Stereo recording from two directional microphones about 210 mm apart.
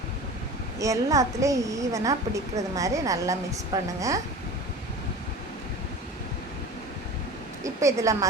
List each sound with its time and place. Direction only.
0.8 s a woman's voice: 15° right (ahead or behind)
7.6 s a woman's voice: 15° right (ahead or behind)